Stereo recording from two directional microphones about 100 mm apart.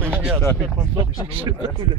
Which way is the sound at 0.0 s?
15° right (ahead or behind).